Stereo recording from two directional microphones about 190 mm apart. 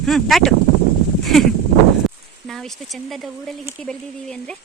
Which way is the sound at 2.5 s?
Centre (ahead or behind).